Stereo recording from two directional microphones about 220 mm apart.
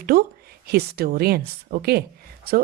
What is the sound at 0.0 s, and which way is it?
A woman's voice, 40° right (ahead or behind).